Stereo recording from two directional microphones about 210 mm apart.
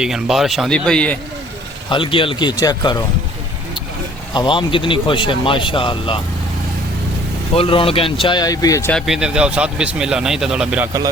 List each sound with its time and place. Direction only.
0.0 s speech: centre (ahead or behind)
1.9 s speech: 25° left (ahead or behind)
4.4 s speech: 25° left (ahead or behind)
7.5 s speech: 25° left (ahead or behind)
8.9 s speech: centre (ahead or behind)